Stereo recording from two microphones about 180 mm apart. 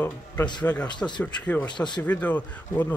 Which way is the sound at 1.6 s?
25° left (ahead or behind).